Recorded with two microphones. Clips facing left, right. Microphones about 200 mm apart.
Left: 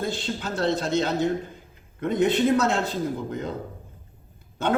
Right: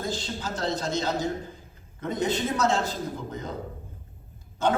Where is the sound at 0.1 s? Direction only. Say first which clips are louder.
Left 2 dB; 60° left (ahead or behind).